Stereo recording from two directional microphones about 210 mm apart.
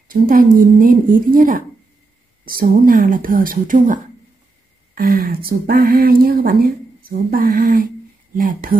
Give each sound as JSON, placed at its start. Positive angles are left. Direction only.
{"t": 0.1, "sound": "speech", "side_deg": -40}